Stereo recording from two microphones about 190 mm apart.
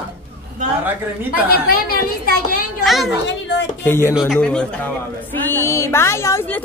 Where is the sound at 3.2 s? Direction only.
70° left (ahead or behind).